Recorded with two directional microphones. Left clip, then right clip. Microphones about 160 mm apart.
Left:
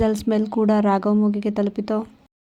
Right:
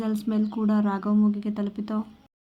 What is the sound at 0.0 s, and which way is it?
Speech, 45° left (ahead or behind).